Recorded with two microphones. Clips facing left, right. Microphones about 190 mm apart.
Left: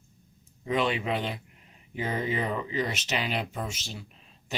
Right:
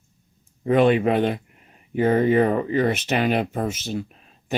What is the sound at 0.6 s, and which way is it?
Speech, 55° right (ahead or behind).